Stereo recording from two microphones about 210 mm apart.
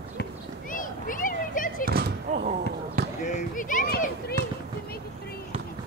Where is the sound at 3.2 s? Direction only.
35° left (ahead or behind).